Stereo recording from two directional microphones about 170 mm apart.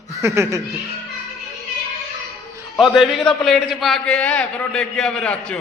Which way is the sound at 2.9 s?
Centre (ahead or behind).